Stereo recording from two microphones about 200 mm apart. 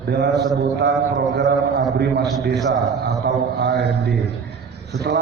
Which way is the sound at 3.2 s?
60° right (ahead or behind).